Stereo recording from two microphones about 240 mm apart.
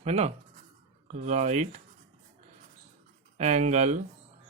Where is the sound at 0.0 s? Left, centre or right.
Right.